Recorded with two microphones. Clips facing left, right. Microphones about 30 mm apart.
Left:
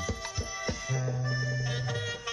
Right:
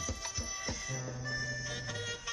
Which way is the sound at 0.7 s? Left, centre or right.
Left.